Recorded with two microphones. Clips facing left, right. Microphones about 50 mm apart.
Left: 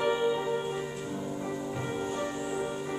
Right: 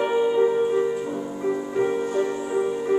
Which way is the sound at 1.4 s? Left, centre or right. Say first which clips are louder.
Right 11 dB; right.